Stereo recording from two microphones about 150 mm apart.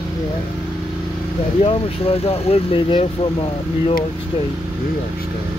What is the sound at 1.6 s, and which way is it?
Speech, 40° left (ahead or behind).